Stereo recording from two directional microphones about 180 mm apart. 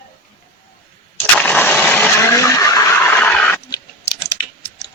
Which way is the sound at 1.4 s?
10° left (ahead or behind).